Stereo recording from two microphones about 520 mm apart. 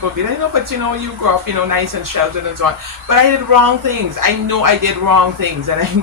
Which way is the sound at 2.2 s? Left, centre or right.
Right.